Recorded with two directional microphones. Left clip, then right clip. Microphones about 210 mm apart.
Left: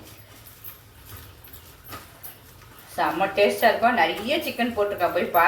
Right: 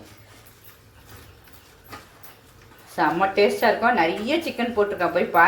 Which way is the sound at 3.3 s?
50° right (ahead or behind).